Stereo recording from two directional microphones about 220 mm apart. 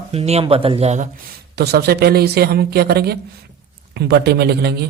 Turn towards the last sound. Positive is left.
turn(degrees=-50)  # may be behind; listen again after turning